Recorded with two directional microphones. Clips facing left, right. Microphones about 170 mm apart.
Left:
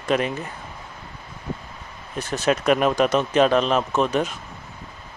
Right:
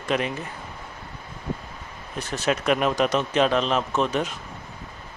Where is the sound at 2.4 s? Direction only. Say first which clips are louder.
Left 3 dB; 45° left (ahead or behind).